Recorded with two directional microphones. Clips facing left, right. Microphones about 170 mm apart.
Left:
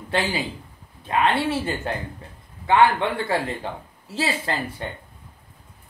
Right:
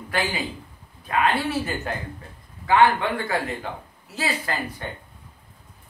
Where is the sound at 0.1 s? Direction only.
25° left (ahead or behind).